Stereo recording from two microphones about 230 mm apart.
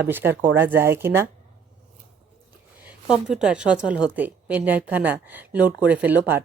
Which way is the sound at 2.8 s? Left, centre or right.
Centre.